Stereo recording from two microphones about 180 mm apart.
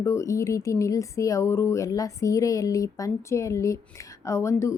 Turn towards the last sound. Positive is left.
turn(degrees=15)  # may be behind; listen again after turning